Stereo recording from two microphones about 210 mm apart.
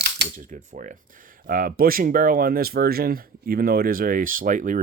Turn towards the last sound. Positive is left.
turn(degrees=-40)  # may be behind; listen again after turning